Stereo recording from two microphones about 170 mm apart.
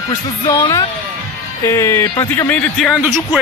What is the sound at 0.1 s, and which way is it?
Speech, 20° left (ahead or behind).